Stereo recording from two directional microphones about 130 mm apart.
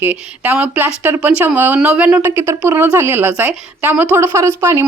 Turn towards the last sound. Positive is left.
turn(degrees=-20)  # may be behind; listen again after turning